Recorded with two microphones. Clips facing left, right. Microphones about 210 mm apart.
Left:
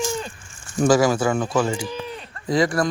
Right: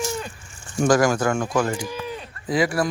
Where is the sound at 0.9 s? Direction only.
5° left (ahead or behind).